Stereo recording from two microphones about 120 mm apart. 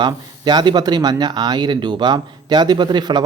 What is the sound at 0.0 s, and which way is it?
Speech, 35° right (ahead or behind).